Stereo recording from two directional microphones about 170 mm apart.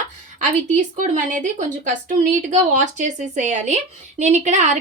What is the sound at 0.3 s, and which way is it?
A woman's voice, 50° right (ahead or behind).